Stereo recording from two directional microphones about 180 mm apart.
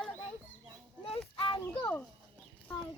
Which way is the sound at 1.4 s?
30° left (ahead or behind).